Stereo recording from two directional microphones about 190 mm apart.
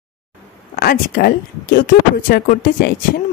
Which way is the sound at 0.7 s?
50° left (ahead or behind).